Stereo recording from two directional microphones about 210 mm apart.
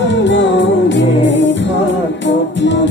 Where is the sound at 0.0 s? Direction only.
60° left (ahead or behind).